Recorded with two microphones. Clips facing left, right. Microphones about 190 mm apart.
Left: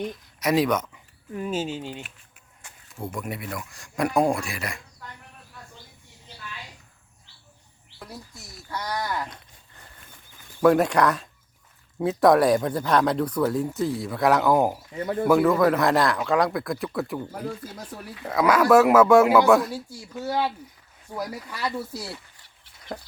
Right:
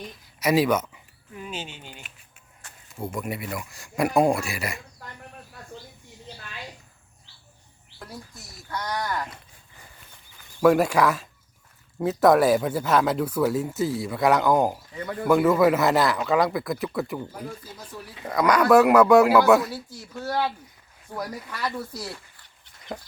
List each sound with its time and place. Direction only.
0.3 s speech: 5° right (ahead or behind)
1.4 s speech: 45° left (ahead or behind)
2.9 s speech: centre (ahead or behind)
8.7 s livestock: 5° left (ahead or behind)
10.6 s speech: 5° right (ahead or behind)
14.9 s speech: 25° left (ahead or behind)
15.3 s speech: centre (ahead or behind)
18.3 s speech: 5° left (ahead or behind)
19.7 s speech: 10° left (ahead or behind)